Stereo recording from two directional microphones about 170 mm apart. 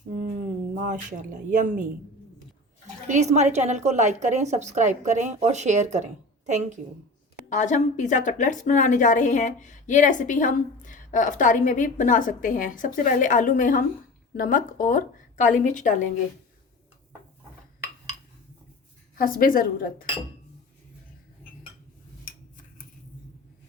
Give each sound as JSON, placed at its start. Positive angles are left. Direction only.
{"t": 0.8, "sound": "a woman's voice", "side_deg": -50}
{"t": 3.1, "sound": "a woman's voice", "side_deg": -40}
{"t": 7.5, "sound": "a woman's voice", "side_deg": 45}
{"t": 19.1, "sound": "a woman's voice", "side_deg": 55}
{"t": 22.2, "sound": "a sound", "side_deg": 55}